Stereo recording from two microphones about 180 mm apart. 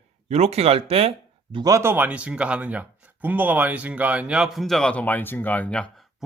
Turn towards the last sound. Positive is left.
turn(degrees=5)  # may be behind; listen again after turning